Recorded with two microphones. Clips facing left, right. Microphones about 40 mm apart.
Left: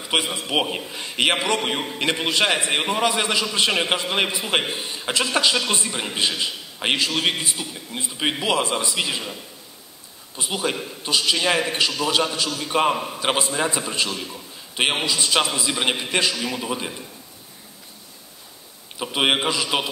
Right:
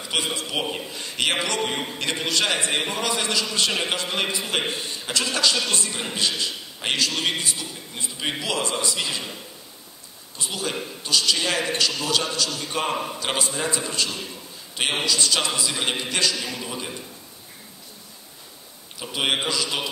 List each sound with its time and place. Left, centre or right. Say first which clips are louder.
0.1 s a man's voice: left 4 dB; left
10.3 s a man's voice: left 4 dB; left
12.9 s a man's voice: left 1 dB; centre
13.2 s a man's voice: left 4 dB; left
18.9 s a man's voice: left 4 dB; left